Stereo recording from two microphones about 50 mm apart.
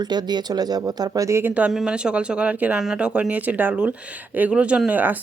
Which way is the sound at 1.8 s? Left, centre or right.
Centre.